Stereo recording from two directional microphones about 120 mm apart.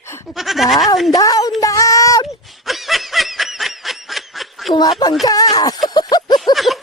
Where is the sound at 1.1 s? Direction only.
30° left (ahead or behind).